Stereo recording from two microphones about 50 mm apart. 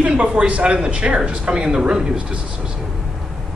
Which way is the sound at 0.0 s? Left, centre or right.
Right.